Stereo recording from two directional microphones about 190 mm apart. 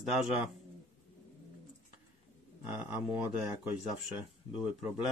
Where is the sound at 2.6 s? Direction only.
10° right (ahead or behind).